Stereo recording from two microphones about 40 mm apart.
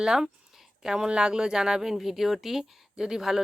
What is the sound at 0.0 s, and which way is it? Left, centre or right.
Speech, centre.